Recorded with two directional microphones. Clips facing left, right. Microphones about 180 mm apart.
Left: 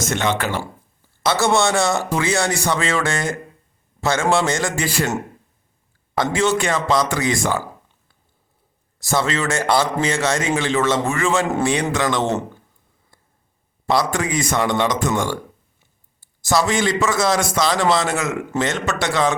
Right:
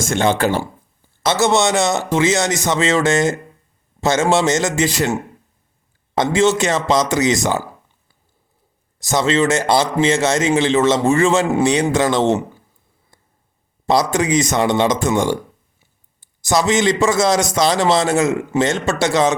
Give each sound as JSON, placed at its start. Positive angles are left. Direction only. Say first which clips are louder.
{"t": 0.1, "sound": "speech", "louder": "right 6 dB", "side_deg": -30}
{"t": 1.3, "sound": "speech", "louder": "right 2 dB", "side_deg": -20}
{"t": 6.1, "sound": "speech", "louder": "right 4 dB", "side_deg": -25}
{"t": 9.0, "sound": "speech", "louder": "right 5 dB", "side_deg": -20}
{"t": 13.8, "sound": "a man's voice", "louder": "right 3 dB", "side_deg": -20}